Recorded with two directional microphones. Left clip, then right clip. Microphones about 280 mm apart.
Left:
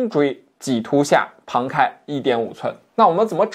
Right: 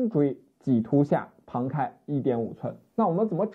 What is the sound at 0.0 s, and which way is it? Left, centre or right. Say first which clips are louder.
Speech: left 7 dB; centre.